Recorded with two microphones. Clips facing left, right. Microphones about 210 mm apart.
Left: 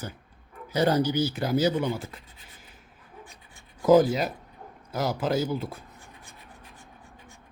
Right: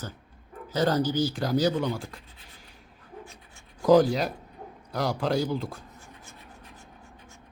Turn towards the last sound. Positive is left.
turn(degrees=5)  # may be behind; listen again after turning